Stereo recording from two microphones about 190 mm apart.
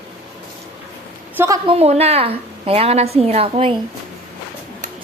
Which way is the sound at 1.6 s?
30° right (ahead or behind).